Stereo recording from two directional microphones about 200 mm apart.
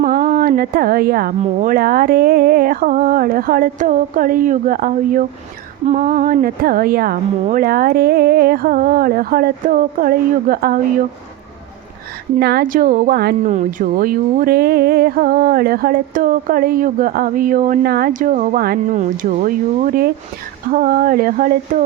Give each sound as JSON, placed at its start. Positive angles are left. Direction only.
{"t": 0.0, "sound": "speech", "side_deg": -45}
{"t": 12.4, "sound": "speech", "side_deg": -50}
{"t": 13.5, "sound": "speech", "side_deg": -40}